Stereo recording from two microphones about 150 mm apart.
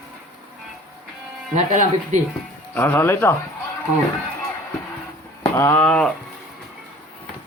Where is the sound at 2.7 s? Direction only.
15° left (ahead or behind).